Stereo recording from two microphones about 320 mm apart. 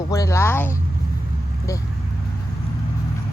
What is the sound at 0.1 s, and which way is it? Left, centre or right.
Speech, centre.